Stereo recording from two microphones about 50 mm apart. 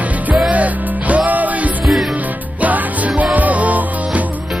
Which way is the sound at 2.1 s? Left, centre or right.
Right.